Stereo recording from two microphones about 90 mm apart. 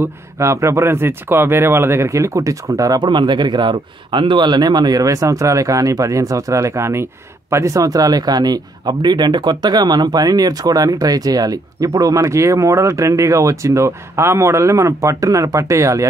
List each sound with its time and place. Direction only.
0.0 s speech: 30° right (ahead or behind)
3.0 s speech: 55° right (ahead or behind); by 16.1 s 35° right (ahead or behind)